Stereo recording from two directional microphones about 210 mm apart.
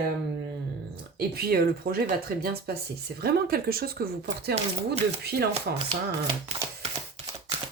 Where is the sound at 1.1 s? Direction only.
45° right (ahead or behind).